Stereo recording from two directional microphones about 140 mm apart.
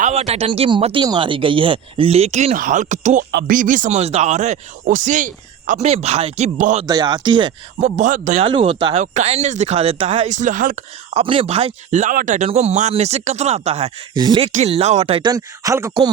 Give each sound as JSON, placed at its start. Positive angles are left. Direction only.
{"t": 0.1, "sound": "speech", "side_deg": -45}
{"t": 6.8, "sound": "speech", "side_deg": -30}
{"t": 7.8, "sound": "speech", "side_deg": -55}
{"t": 8.4, "sound": "speech", "side_deg": -40}
{"t": 9.1, "sound": "speech", "side_deg": -50}
{"t": 11.1, "sound": "speech", "side_deg": -40}
{"t": 12.5, "sound": "speech", "side_deg": -50}
{"t": 14.2, "sound": "speech", "side_deg": -35}
{"t": 14.5, "sound": "speech", "side_deg": -50}
{"t": 15.3, "sound": "speech", "side_deg": -25}